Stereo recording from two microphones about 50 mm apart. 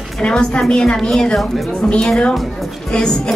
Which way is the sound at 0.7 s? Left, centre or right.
Centre.